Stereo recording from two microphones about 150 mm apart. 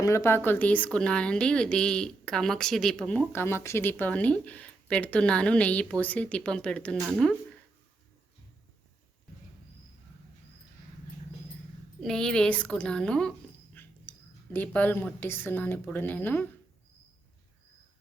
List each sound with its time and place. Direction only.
0.0 s a woman's voice: 20° left (ahead or behind)
11.9 s a woman's voice: 5° left (ahead or behind)